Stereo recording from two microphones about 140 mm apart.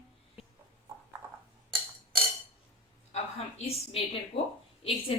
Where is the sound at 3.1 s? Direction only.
45° left (ahead or behind).